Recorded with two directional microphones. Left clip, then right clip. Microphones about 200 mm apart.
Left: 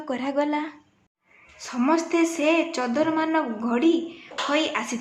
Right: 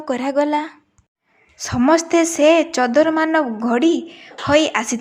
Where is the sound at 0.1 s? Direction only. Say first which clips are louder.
Right 7 dB; 40° right (ahead or behind).